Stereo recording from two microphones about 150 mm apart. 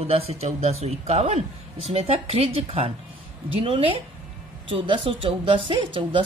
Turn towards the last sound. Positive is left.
turn(degrees=-35)  # may be behind; listen again after turning